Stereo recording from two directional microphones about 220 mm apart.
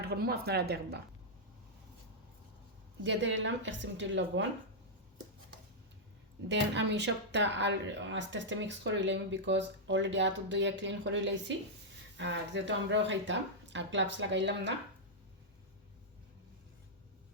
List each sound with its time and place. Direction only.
0.0 s speech: 45° right (ahead or behind)
3.0 s speech: 55° right (ahead or behind)
6.5 s speech: 50° right (ahead or behind)